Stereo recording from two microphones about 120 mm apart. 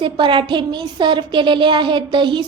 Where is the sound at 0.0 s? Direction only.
40° right (ahead or behind).